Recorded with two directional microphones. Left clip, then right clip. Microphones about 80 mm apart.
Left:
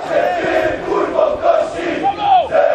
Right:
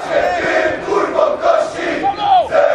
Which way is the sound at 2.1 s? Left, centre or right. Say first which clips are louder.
Even; centre.